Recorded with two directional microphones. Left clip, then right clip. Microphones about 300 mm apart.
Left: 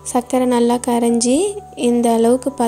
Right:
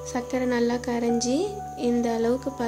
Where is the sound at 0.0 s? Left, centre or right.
Left.